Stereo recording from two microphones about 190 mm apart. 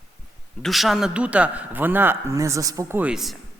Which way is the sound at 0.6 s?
Centre (ahead or behind).